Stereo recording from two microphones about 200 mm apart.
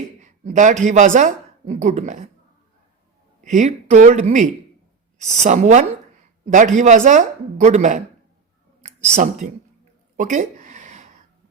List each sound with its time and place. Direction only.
0.2 s speech: 40° right (ahead or behind)
3.4 s speech: 40° right (ahead or behind)
9.1 s speech: 35° right (ahead or behind)
10.2 s a sound: 40° right (ahead or behind)